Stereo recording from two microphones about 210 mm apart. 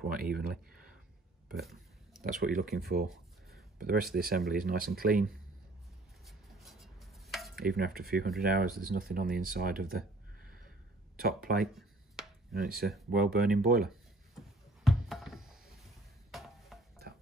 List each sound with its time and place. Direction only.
0.1 s speech: 45° right (ahead or behind)
1.6 s a sound: centre (ahead or behind)
2.2 s speech: 40° right (ahead or behind)
6.2 s chopping: centre (ahead or behind)
7.5 s speech: 45° right (ahead or behind)
11.1 s speech: 45° right (ahead or behind)
14.9 s a sound: centre (ahead or behind)
16.3 s stir: centre (ahead or behind)